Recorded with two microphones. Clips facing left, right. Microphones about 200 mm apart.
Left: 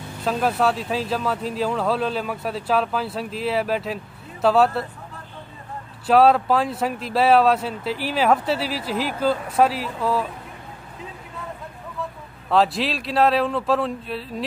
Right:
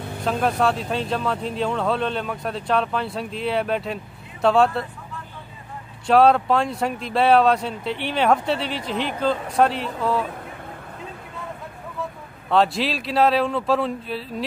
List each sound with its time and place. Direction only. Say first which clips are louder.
0.2 s speech: even; centre (ahead or behind)
6.0 s speech: even; centre (ahead or behind)
12.4 s speech: even; centre (ahead or behind)